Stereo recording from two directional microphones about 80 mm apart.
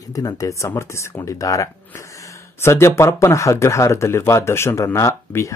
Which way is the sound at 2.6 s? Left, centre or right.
Left.